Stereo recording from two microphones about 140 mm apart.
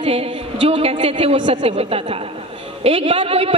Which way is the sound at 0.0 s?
45° right (ahead or behind).